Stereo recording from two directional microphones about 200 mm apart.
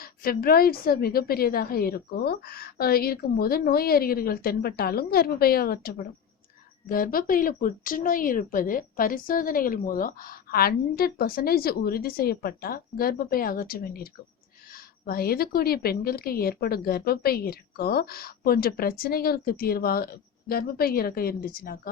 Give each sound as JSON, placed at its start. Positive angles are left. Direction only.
{"t": 0.0, "sound": "speech", "side_deg": 50}